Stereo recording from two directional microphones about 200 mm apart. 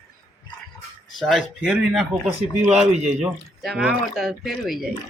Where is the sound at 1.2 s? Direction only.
Centre (ahead or behind).